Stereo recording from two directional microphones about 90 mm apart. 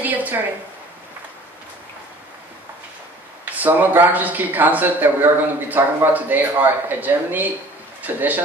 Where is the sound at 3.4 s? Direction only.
20° right (ahead or behind).